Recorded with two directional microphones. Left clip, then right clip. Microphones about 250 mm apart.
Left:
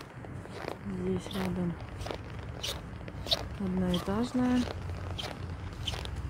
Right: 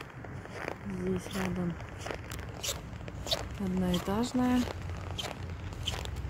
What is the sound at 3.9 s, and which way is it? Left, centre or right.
Speech, centre.